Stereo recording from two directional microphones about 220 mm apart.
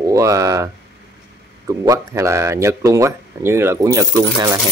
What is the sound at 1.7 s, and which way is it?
Speech, 15° right (ahead or behind).